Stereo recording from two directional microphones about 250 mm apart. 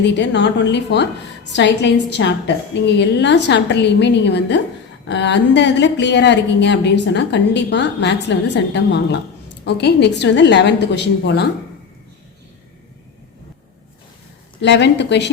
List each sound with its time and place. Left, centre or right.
0.1 s a woman's voice: left
14.6 s a woman's voice: left